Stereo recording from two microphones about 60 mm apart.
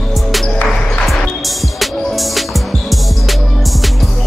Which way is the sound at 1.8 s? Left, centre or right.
Centre.